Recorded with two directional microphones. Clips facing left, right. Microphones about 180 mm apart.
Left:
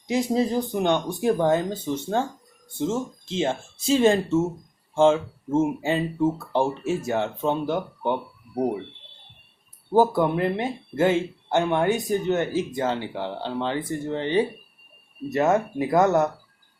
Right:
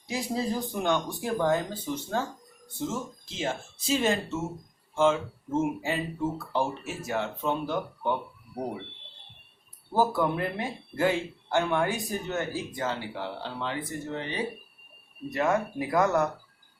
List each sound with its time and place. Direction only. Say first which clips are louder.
0.1 s speech: left 7 dB; 20° left (ahead or behind)
9.9 s speech: left 6 dB; 20° left (ahead or behind)